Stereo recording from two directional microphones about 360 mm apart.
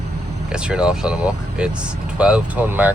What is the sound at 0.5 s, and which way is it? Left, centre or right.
Speech, centre.